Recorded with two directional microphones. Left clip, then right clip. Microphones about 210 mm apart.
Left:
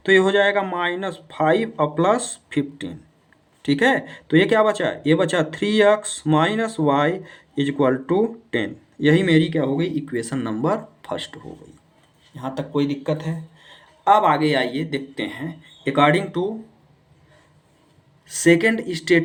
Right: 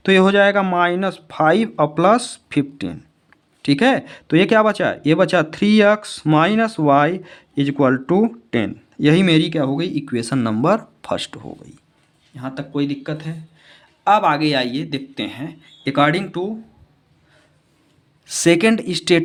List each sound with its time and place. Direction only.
0.0 s speech: 50° right (ahead or behind)
12.4 s speech: 25° right (ahead or behind)
14.0 s speech: 45° right (ahead or behind)
18.3 s speech: 60° right (ahead or behind)